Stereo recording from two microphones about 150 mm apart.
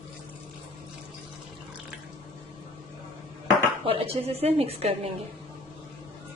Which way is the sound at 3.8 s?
40° right (ahead or behind).